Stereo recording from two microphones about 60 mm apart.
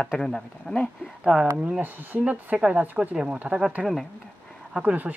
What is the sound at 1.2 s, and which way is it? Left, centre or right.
Speech, centre.